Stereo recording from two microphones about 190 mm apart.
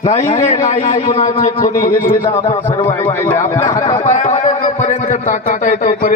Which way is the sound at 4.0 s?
35° left (ahead or behind).